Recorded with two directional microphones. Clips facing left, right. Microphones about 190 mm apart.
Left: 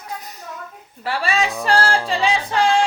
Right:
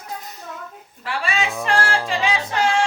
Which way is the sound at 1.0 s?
40° left (ahead or behind).